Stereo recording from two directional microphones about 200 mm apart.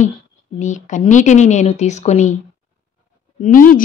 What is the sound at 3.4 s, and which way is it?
Speech, 45° left (ahead or behind).